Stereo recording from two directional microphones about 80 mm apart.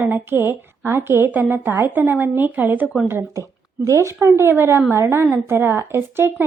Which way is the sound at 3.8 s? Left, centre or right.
Right.